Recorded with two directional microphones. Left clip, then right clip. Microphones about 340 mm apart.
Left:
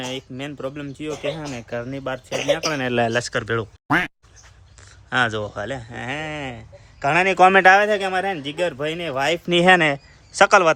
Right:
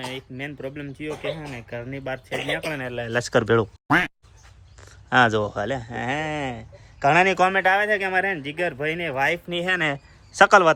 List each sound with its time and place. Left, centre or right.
0.0 s speech: centre
3.1 s speech: centre
7.4 s speech: left
9.5 s speech: left
9.7 s a man's voice: centre